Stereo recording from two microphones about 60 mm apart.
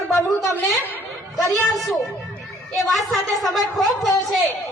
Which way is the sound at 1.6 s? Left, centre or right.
Centre.